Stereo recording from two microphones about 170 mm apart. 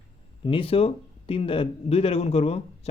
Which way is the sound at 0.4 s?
35° left (ahead or behind).